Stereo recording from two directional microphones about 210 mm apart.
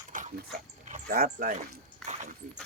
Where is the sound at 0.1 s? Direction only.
40° right (ahead or behind).